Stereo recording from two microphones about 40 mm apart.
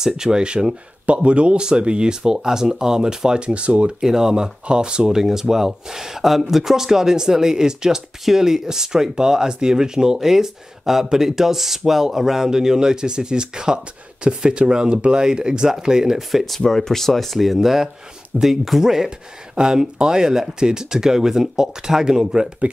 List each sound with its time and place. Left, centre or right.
0.0 s speech: centre
3.3 s speech: right
4.0 s speech: centre
16.2 s speech: centre